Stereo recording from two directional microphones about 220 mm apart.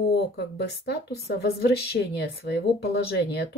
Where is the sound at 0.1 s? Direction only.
50° left (ahead or behind).